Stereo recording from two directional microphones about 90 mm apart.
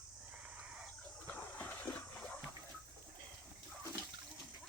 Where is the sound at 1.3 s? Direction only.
20° left (ahead or behind).